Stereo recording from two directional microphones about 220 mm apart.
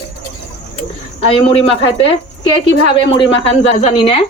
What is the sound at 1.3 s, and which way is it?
Speech, 25° left (ahead or behind).